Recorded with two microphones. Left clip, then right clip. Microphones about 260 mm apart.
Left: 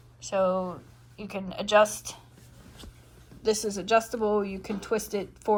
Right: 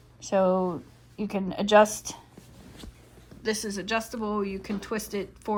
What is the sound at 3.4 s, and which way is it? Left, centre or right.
A woman's voice, centre.